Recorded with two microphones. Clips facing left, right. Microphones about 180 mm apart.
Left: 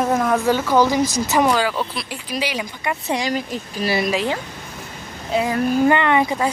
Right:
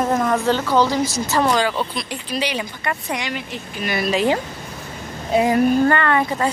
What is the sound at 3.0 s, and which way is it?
Speech, 35° left (ahead or behind).